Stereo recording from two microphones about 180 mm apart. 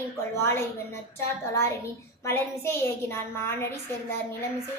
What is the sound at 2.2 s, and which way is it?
A woman's voice, 15° left (ahead or behind).